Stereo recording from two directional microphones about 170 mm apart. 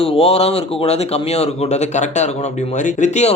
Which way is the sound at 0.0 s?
35° left (ahead or behind).